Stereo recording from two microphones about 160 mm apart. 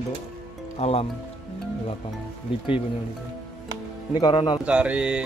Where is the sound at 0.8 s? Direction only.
40° left (ahead or behind).